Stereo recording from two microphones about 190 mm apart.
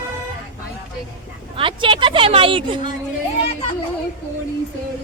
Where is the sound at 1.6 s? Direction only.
25° right (ahead or behind).